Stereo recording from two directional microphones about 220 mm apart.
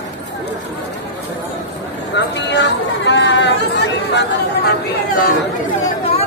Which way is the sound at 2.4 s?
55° left (ahead or behind).